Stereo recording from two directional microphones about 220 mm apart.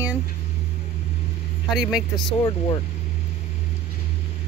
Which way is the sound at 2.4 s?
20° left (ahead or behind).